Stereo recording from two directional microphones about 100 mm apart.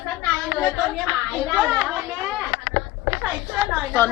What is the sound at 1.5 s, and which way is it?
Speech, centre (ahead or behind).